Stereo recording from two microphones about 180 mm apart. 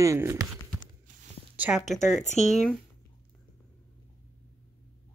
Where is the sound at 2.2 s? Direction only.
40° left (ahead or behind).